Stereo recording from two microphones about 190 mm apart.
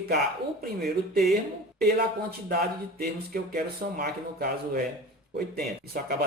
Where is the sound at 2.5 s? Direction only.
50° right (ahead or behind).